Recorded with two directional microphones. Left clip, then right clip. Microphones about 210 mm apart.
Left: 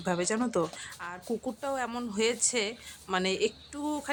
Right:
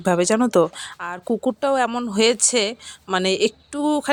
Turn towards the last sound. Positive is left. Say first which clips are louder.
# right 13 dB
turn(degrees=-40)  # may be behind; listen again after turning